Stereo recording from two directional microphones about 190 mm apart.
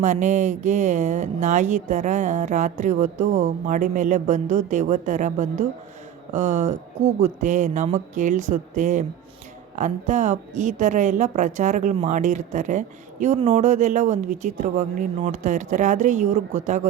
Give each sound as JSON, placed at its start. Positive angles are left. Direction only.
{"t": 0.0, "sound": "a woman's voice", "side_deg": -40}